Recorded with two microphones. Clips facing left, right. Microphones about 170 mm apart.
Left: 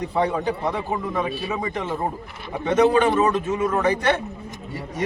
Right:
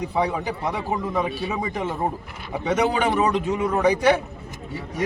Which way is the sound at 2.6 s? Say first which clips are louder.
Left 4 dB; 5° right (ahead or behind).